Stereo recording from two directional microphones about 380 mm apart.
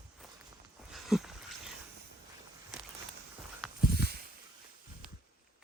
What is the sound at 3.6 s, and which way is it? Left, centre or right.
Walk, centre.